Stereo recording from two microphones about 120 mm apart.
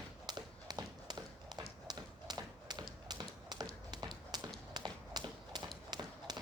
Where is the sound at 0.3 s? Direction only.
35° right (ahead or behind).